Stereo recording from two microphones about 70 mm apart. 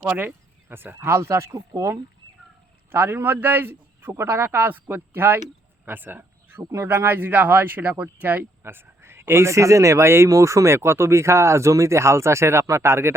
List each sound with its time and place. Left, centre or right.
0.0 s speech: right
6.6 s speech: right